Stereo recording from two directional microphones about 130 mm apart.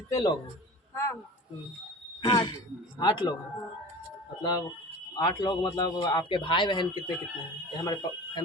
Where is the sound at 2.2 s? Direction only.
30° left (ahead or behind).